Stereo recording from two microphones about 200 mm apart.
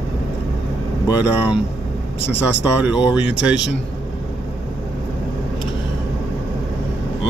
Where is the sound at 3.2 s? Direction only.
65° left (ahead or behind).